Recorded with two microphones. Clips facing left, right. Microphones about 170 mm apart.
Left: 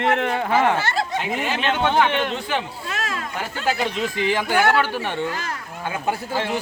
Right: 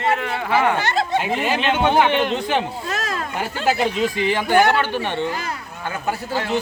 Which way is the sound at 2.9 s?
40° right (ahead or behind).